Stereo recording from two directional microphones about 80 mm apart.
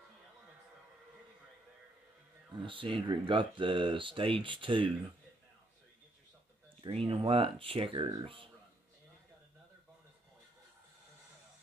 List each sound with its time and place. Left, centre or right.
2.5 s speech: right
6.8 s speech: right